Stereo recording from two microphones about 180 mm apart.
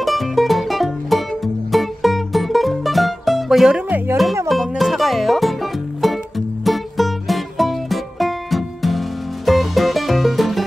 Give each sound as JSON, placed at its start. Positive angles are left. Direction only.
{"t": 0.0, "sound": "music", "side_deg": 0}